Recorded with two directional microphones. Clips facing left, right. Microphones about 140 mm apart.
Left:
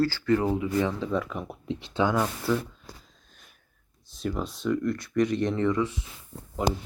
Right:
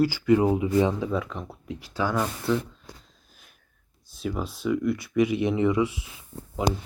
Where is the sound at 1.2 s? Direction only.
5° left (ahead or behind).